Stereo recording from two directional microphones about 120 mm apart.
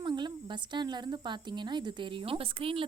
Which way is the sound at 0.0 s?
40° right (ahead or behind).